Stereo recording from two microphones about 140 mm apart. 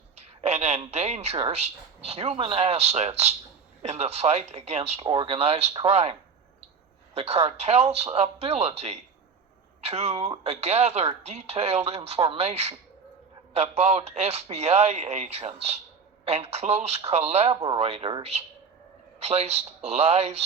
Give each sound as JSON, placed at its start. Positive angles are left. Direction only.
{"t": 0.2, "sound": "speech", "side_deg": -50}